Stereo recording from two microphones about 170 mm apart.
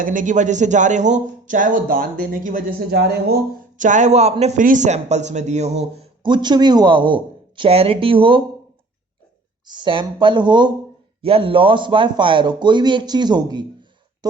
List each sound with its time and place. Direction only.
0.0 s speech: 50° right (ahead or behind); by 3.3 s 70° right (ahead or behind)
3.8 s a man's voice: 45° right (ahead or behind); by 8.4 s 30° right (ahead or behind)
9.6 s a man's voice: 25° right (ahead or behind)